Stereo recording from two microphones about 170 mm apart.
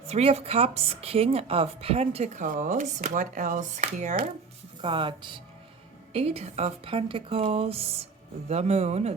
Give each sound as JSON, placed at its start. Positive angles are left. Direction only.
{"t": 0.1, "sound": "speech", "side_deg": -40}
{"t": 4.8, "sound": "speech", "side_deg": -30}